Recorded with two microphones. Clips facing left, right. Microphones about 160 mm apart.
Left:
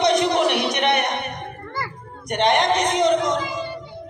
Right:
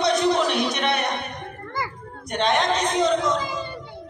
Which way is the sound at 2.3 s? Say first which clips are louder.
Left 3 dB; 15° left (ahead or behind).